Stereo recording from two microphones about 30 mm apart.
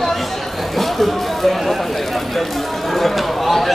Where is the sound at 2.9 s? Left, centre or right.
Centre.